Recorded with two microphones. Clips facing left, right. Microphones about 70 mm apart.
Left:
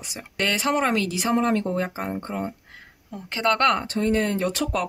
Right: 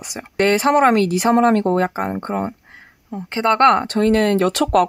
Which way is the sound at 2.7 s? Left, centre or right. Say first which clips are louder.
Right 7 dB; right.